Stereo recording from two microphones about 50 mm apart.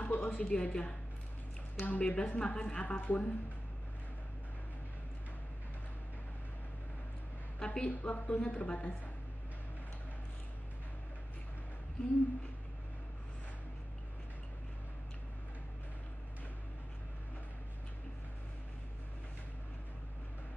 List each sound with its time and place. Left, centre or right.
0.0 s a woman's voice: left
7.5 s a sound: left
7.9 s a woman's voice: left